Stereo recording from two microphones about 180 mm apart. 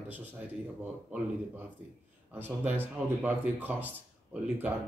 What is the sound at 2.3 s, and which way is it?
A man's voice, 10° right (ahead or behind).